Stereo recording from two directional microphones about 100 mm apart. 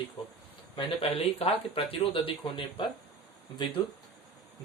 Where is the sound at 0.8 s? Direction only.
70° left (ahead or behind).